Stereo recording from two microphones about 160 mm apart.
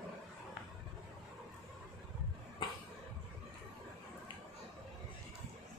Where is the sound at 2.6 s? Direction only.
30° left (ahead or behind).